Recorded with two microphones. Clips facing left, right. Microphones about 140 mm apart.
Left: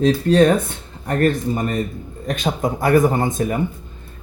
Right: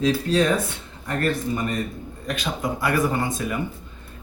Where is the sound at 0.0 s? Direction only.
55° left (ahead or behind).